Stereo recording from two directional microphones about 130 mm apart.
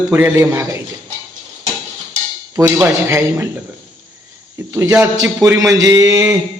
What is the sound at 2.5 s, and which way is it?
Speech, 20° right (ahead or behind).